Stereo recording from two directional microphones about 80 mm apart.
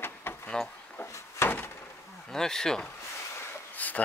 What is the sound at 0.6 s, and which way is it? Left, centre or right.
Speech, centre.